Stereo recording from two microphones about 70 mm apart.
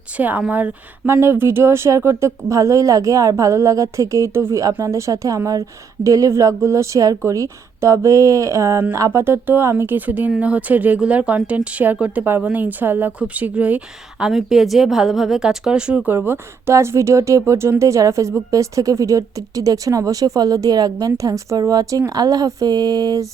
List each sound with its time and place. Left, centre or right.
0.2 s speech: right
9.2 s speech: right
14.3 s a woman's voice: centre
16.0 s speech: right
21.2 s speech: right